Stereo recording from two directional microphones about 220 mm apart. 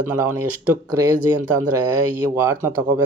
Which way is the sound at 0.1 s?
10° right (ahead or behind).